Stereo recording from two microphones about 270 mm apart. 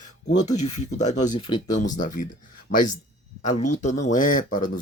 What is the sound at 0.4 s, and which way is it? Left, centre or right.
Speech, left.